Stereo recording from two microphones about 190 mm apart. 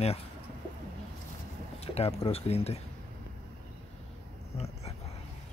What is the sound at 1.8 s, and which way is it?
Speech, 35° left (ahead or behind).